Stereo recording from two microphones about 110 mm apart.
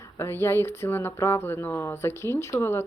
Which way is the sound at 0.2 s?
25° left (ahead or behind).